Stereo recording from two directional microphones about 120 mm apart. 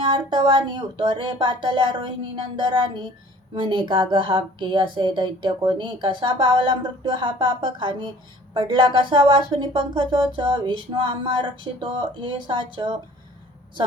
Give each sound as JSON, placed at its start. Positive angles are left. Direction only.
{"t": 0.0, "sound": "a woman's voice", "side_deg": -45}